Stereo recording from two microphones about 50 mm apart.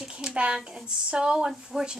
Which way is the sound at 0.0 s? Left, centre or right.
Centre.